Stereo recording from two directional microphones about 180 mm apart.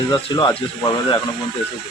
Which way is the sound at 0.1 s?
25° left (ahead or behind).